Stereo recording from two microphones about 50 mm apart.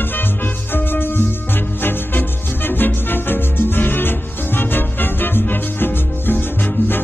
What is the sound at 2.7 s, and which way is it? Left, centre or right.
Music, left.